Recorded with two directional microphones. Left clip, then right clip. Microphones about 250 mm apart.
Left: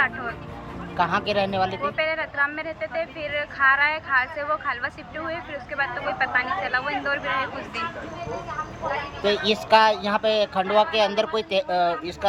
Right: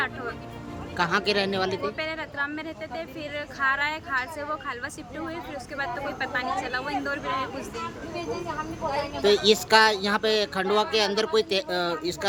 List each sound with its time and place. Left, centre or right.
0.9 s speech: centre
9.2 s speech: centre